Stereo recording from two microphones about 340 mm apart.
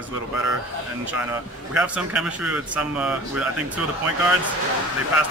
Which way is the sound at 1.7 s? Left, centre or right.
Centre.